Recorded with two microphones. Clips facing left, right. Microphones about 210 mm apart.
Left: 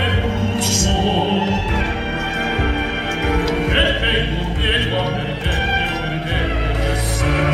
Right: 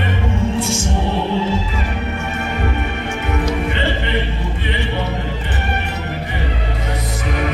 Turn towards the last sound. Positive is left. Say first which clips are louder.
# left 3 dB
turn(degrees=70)  # may be behind; listen again after turning